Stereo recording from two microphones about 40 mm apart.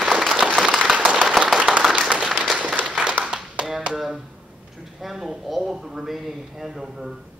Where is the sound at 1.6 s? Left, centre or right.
Right.